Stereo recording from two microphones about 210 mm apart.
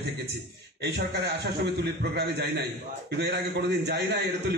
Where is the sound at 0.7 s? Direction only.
55° right (ahead or behind).